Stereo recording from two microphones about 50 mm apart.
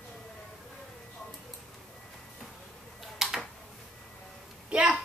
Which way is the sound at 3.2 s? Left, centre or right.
Centre.